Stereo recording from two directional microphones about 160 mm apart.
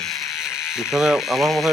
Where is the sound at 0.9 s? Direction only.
5° right (ahead or behind).